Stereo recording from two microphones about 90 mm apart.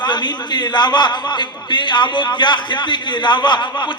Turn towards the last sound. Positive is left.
turn(degrees=55)  # may be behind; listen again after turning